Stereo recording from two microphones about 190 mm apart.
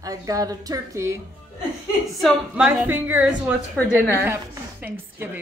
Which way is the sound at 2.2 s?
5° right (ahead or behind).